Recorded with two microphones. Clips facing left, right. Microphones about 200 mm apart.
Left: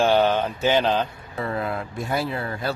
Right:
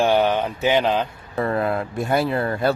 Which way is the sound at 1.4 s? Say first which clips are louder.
Right 5 dB; 55° right (ahead or behind).